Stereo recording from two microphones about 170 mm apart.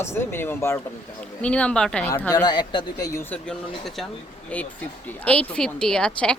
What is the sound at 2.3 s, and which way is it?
Speech, 25° left (ahead or behind).